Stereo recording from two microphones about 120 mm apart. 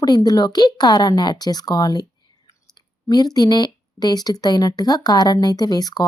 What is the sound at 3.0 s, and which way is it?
Speech, 35° left (ahead or behind).